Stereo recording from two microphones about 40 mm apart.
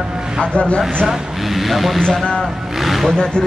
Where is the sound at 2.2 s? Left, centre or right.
Centre.